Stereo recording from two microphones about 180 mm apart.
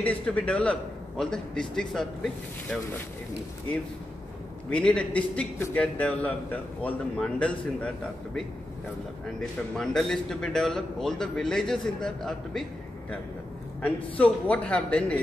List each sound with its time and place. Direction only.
0.0 s a man's voice: 10° left (ahead or behind)
4.6 s a man's voice: 5° left (ahead or behind)
9.8 s a man's voice: 5° left (ahead or behind)
13.8 s a man's voice: 5° left (ahead or behind)